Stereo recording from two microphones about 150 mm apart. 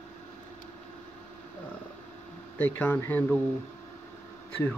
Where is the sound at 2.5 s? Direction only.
10° left (ahead or behind).